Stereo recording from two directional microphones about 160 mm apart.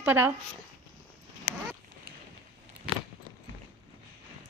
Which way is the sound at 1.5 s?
70° left (ahead or behind).